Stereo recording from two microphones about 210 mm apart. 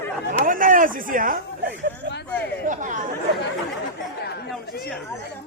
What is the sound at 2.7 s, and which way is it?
Speech, 35° right (ahead or behind).